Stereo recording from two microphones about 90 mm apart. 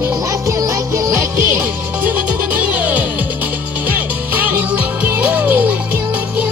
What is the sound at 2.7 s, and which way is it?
Music, 20° right (ahead or behind).